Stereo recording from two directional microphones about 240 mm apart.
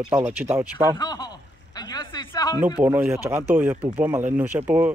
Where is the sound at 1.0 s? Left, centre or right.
Centre.